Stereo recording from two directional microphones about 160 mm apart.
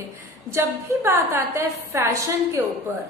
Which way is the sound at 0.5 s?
15° right (ahead or behind).